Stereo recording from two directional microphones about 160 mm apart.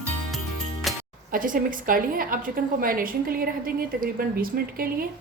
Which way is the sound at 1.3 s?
60° right (ahead or behind).